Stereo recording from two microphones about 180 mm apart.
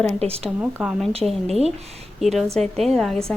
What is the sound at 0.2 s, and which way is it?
Speech, 35° right (ahead or behind).